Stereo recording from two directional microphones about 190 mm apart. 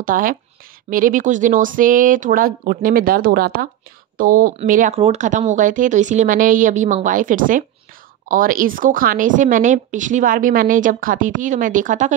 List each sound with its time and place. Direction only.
0.0 s a woman's voice: 45° right (ahead or behind)